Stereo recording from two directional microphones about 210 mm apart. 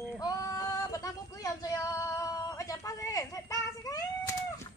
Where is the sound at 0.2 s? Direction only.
15° left (ahead or behind).